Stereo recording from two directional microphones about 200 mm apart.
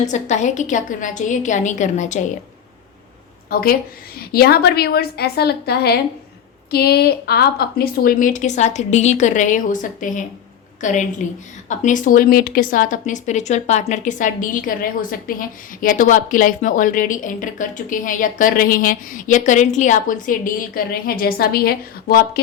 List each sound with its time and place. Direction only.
0.0 s a woman's voice: 35° left (ahead or behind)
3.5 s a woman's voice: 45° left (ahead or behind)